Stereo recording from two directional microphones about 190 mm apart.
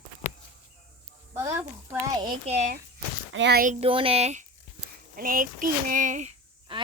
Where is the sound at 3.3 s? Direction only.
60° right (ahead or behind).